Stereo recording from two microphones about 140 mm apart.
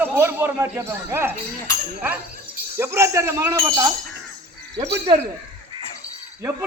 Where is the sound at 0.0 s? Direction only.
15° right (ahead or behind).